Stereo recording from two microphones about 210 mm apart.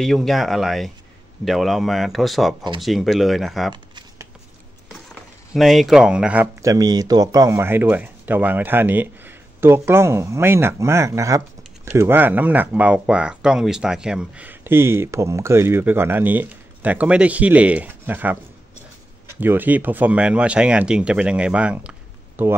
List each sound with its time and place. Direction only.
0.0 s speech: centre (ahead or behind)
3.7 s a sound: 20° right (ahead or behind)
5.5 s speech: centre (ahead or behind)
19.4 s speech: 10° right (ahead or behind)